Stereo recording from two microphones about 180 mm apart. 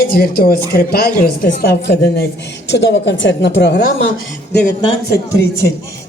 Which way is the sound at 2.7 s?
80° left.